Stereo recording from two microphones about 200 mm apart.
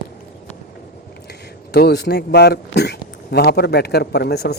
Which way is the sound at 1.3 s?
55° left (ahead or behind).